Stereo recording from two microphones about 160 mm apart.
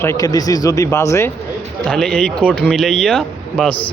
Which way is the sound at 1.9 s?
5° left (ahead or behind).